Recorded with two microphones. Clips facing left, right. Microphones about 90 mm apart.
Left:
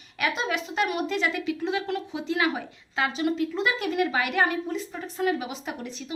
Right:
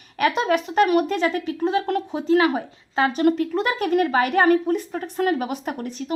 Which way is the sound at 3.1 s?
55° right (ahead or behind).